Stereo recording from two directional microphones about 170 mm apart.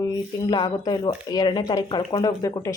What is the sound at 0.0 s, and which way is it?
Speech, 20° left (ahead or behind).